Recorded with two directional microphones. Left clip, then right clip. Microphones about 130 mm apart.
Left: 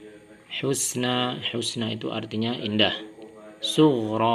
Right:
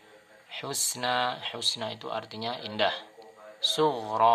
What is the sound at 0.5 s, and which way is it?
Speech, 35° right (ahead or behind).